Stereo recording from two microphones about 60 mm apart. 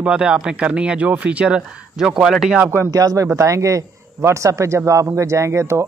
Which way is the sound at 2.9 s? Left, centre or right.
Right.